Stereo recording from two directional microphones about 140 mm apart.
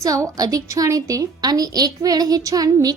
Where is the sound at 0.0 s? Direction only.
25° right (ahead or behind).